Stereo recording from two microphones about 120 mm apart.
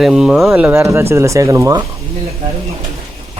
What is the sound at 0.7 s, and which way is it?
Speech, 25° right (ahead or behind).